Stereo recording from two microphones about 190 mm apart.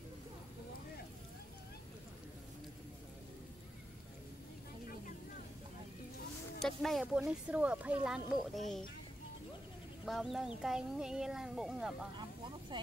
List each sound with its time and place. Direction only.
6.6 s speech: centre (ahead or behind)
10.0 s speech: centre (ahead or behind)
12.2 s vehicle: 25° right (ahead or behind)